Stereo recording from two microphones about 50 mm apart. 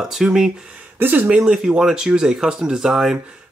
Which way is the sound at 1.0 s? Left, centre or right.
Right.